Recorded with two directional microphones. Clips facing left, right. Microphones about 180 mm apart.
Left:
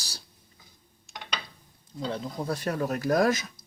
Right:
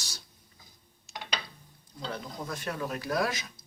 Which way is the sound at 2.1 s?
30° left (ahead or behind).